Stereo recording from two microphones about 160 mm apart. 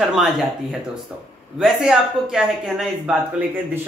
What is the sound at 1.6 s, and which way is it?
A man's voice, 5° right (ahead or behind).